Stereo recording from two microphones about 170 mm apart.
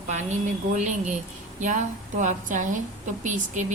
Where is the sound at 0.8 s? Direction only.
45° right (ahead or behind).